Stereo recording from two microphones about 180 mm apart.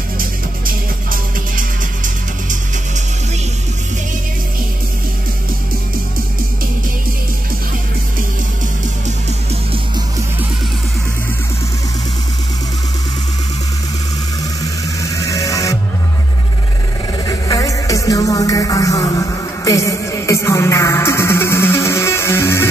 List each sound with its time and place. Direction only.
8.8 s music: 40° right (ahead or behind)
15.0 s music: 20° left (ahead or behind)
17.3 s music: 20° left (ahead or behind)